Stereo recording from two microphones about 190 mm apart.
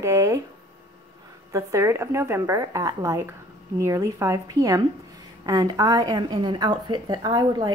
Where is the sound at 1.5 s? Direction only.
15° right (ahead or behind).